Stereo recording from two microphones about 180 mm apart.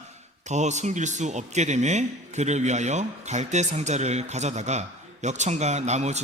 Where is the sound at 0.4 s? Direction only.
40° right (ahead or behind).